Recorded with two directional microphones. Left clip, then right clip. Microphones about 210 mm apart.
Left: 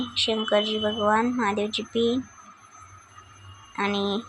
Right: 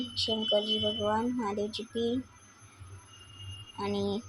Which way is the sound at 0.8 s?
30° left (ahead or behind).